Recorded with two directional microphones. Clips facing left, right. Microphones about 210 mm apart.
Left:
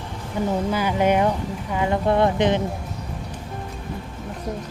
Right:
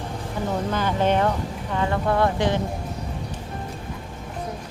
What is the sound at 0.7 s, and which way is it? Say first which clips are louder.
Speech: left 1 dB; 10° left (ahead or behind).